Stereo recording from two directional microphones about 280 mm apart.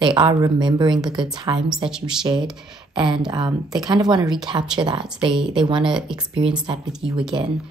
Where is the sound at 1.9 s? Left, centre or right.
Centre.